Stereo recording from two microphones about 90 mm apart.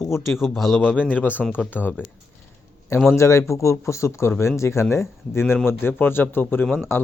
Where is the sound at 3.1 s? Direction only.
35° left (ahead or behind).